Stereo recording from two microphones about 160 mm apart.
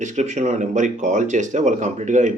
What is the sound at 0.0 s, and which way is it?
Speech, 50° right (ahead or behind).